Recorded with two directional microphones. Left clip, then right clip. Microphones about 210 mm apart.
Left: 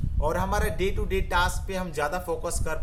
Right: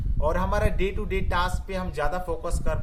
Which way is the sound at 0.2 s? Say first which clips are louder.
Right 1 dB; centre (ahead or behind).